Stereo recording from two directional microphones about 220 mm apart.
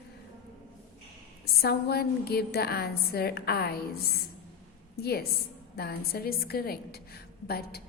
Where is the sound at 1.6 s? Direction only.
45° left (ahead or behind).